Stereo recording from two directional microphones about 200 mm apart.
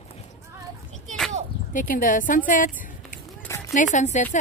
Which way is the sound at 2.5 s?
40° left (ahead or behind).